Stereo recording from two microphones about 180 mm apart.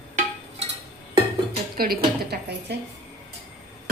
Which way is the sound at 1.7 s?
55° right (ahead or behind).